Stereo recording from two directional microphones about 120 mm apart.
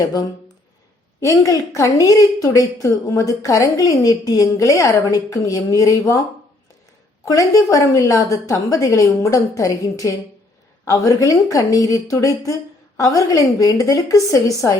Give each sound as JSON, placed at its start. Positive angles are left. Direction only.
{"t": 0.0, "sound": "a woman's voice", "side_deg": 30}
{"t": 7.3, "sound": "a woman's voice", "side_deg": 30}